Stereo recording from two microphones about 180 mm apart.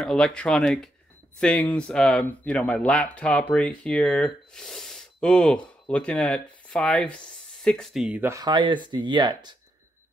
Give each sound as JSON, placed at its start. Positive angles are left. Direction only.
{"t": 0.0, "sound": "speech", "side_deg": 5}